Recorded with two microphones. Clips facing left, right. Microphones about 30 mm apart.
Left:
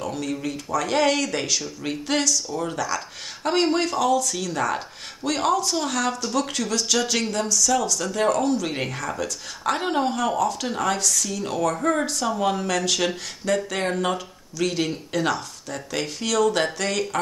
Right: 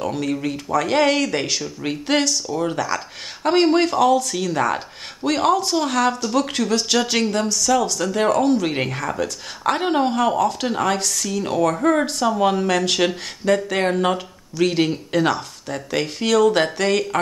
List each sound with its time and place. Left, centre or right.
0.0 s speech: right
2.1 s speech: right
2.5 s speech: centre; by 7.7 s right
8.0 s speech: right
10.1 s speech: right
14.1 s speech: right